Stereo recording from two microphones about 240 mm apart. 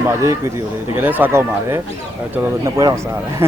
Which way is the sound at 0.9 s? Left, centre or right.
Centre.